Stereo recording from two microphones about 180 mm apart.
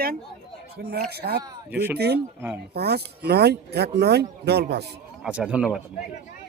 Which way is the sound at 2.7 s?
65° right (ahead or behind).